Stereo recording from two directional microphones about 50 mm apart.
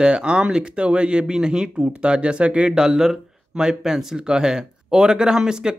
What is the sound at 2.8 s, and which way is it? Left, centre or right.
Speech, centre.